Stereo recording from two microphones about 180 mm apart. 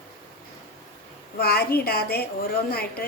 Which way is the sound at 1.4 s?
60° left (ahead or behind).